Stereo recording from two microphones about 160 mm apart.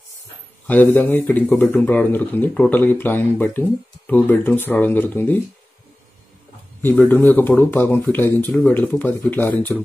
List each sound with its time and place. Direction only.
0.7 s speech: 10° left (ahead or behind)
6.8 s speech: 10° left (ahead or behind)